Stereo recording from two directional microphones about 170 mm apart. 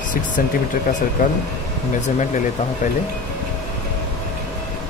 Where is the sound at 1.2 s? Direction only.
50° left (ahead or behind).